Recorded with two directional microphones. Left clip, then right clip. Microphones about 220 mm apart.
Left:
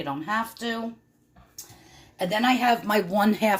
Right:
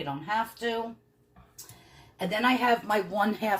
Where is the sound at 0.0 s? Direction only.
40° left (ahead or behind).